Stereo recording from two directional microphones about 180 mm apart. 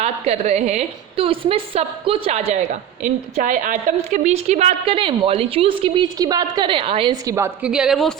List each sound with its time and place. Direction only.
0.0 s a woman's voice: 35° right (ahead or behind); by 8.1 s centre (ahead or behind)